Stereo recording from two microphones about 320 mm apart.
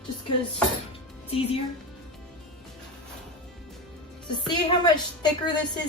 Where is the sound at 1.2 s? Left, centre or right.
Centre.